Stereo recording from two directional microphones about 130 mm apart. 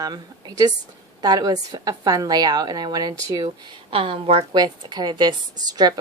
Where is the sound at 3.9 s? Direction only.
45° right (ahead or behind).